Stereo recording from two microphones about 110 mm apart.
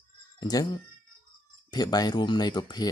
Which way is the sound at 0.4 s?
35° left (ahead or behind).